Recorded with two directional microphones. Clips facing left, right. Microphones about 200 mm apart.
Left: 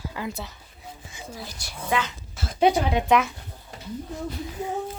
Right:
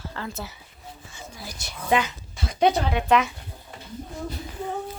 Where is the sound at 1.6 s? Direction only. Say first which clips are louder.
Right 4 dB; 20° right (ahead or behind).